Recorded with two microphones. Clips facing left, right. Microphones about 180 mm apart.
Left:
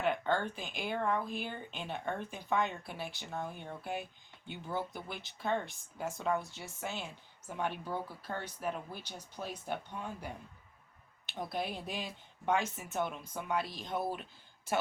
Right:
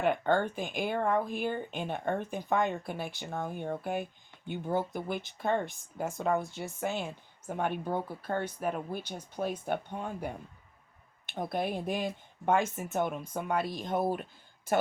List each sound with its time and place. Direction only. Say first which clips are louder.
0.0 s speech: right 5 dB; 50° right (ahead or behind)